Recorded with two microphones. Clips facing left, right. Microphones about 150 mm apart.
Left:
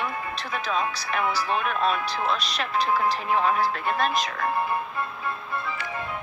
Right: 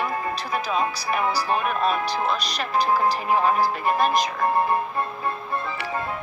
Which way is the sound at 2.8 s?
40° right (ahead or behind).